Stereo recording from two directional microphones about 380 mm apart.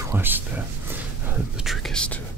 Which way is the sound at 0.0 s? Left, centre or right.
Centre.